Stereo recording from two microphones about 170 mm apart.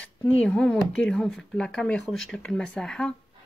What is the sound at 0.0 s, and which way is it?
Speech, 10° left (ahead or behind).